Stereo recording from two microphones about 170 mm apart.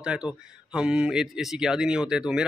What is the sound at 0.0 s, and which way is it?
Speech, 5° right (ahead or behind).